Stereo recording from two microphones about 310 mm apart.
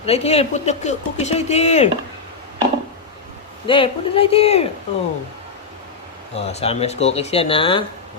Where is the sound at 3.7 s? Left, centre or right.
Centre.